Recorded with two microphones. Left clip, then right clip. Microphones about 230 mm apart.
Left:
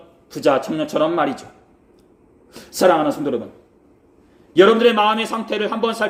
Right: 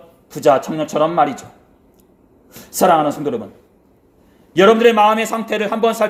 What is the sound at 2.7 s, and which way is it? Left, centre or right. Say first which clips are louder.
Speech: right 2 dB; right.